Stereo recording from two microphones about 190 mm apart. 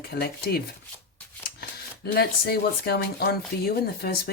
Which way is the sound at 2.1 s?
55° left (ahead or behind).